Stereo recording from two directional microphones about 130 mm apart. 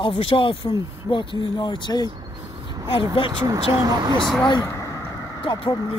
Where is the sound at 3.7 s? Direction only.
25° right (ahead or behind).